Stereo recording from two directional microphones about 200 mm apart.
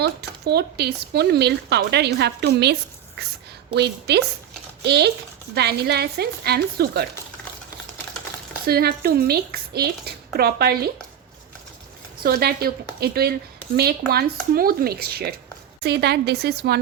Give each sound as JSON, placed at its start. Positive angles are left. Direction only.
{"t": 0.0, "sound": "speech", "side_deg": -55}
{"t": 8.6, "sound": "speech", "side_deg": -50}
{"t": 12.2, "sound": "speech", "side_deg": -50}